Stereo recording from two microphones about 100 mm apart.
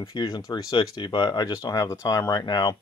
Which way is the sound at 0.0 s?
45° left (ahead or behind).